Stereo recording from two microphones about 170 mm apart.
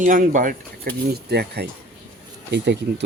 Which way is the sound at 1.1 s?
75° right (ahead or behind).